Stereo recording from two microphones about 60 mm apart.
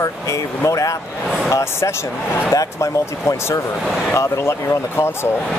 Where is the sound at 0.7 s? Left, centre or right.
Left.